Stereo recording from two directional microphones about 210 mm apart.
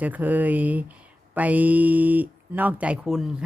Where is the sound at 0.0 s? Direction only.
10° right (ahead or behind).